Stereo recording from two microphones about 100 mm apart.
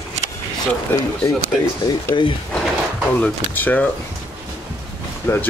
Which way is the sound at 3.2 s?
15° left (ahead or behind).